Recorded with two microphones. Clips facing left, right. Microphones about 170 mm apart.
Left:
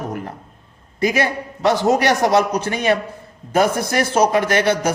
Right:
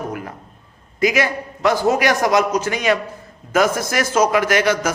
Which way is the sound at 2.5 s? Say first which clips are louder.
Even; 60° left (ahead or behind).